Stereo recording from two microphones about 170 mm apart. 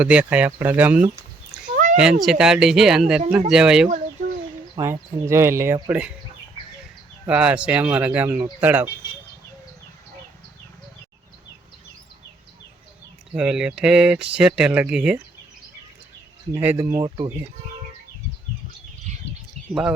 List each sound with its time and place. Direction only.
0.0 s speech: 5° right (ahead or behind)
1.7 s a sound: 50° right (ahead or behind)
2.0 s speech: 5° right (ahead or behind)
3.8 s bird: 45° right (ahead or behind)
4.8 s speech: 15° right (ahead or behind)
7.3 s speech: 5° right (ahead or behind)
13.3 s speech: 5° right (ahead or behind)
16.6 s speech: 10° right (ahead or behind)
16.8 s speech: 25° right (ahead or behind)
19.6 s bird: 40° right (ahead or behind)